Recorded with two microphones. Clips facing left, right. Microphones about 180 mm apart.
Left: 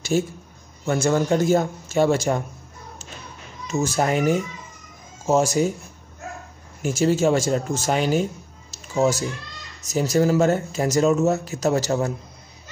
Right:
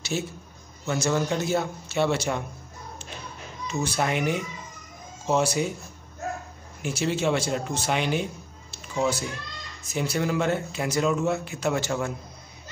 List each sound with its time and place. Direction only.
0.1 s a man's voice: 45° left (ahead or behind)
3.6 s a man's voice: 45° left (ahead or behind)
6.8 s a man's voice: 45° left (ahead or behind)